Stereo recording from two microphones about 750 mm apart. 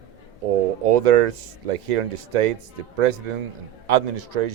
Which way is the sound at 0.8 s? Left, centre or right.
Right.